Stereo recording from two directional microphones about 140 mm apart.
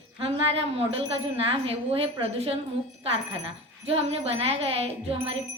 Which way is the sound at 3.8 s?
45° right (ahead or behind).